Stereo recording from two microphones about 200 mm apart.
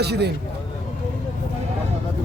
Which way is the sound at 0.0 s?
55° right (ahead or behind).